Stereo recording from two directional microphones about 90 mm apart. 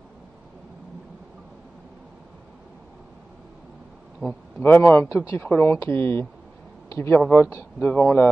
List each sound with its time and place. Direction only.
4.3 s speech: 20° left (ahead or behind)
7.4 s speech: 35° left (ahead or behind)